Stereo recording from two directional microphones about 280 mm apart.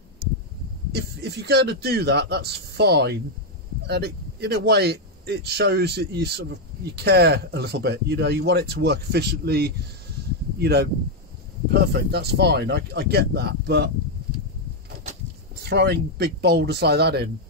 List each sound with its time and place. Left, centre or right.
0.9 s speech: right
15.6 s speech: right